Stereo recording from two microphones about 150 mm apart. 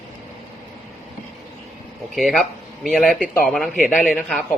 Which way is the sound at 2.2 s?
Centre (ahead or behind).